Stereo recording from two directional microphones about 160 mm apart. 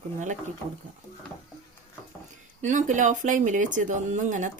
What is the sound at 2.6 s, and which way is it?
Speech, 50° right (ahead or behind).